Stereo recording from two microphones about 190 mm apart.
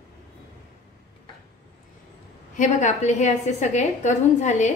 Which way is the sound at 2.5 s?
40° left (ahead or behind).